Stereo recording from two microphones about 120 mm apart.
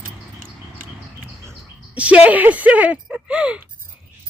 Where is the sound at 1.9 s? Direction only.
10° right (ahead or behind).